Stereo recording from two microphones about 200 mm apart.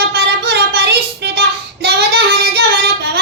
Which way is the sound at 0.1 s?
55° right (ahead or behind).